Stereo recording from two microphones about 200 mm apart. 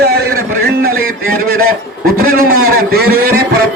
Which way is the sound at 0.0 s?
55° right (ahead or behind).